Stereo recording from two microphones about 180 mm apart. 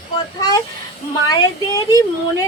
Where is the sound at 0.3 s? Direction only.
20° left (ahead or behind).